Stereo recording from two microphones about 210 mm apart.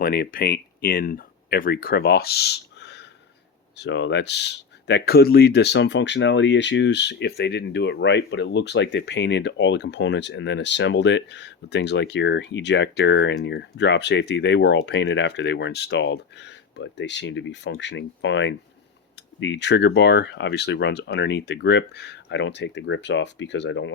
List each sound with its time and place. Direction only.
0.0 s speech: 45° left (ahead or behind)